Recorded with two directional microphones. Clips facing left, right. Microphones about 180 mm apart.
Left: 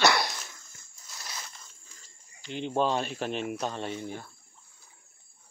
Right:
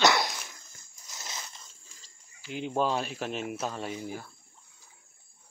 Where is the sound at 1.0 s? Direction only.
20° right (ahead or behind).